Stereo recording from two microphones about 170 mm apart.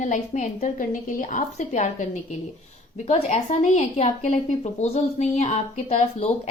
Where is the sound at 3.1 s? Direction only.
40° left (ahead or behind).